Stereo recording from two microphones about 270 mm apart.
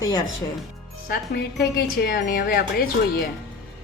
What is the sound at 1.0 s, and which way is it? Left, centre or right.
A woman's voice, left.